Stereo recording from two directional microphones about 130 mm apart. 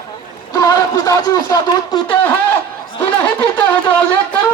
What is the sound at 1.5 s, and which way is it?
Speech, 25° left (ahead or behind).